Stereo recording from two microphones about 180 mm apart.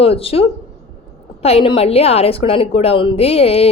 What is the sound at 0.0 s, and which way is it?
Speech, 30° left (ahead or behind).